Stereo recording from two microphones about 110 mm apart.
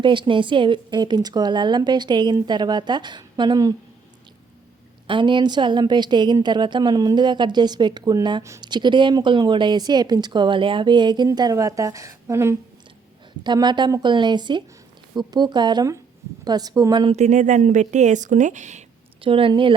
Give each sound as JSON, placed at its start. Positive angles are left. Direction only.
{"t": 0.0, "sound": "speech", "side_deg": -50}
{"t": 5.0, "sound": "speech", "side_deg": -45}
{"t": 11.3, "sound": "a woman's voice", "side_deg": -35}
{"t": 13.4, "sound": "speech", "side_deg": -40}
{"t": 17.1, "sound": "speech", "side_deg": -90}
{"t": 19.2, "sound": "speech", "side_deg": -55}